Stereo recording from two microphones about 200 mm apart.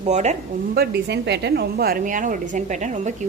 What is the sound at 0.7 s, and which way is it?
A woman's voice, 55° right (ahead or behind).